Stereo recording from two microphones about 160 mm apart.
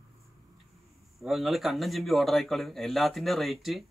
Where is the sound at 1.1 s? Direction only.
Centre (ahead or behind).